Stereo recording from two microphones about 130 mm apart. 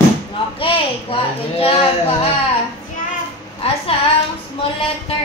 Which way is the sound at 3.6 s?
50° left (ahead or behind).